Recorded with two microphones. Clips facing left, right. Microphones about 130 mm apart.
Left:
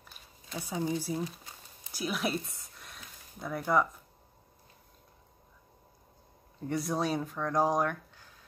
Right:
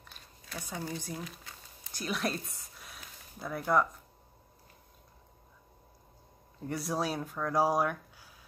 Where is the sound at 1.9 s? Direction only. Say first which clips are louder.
Left 2 dB; 5° left (ahead or behind).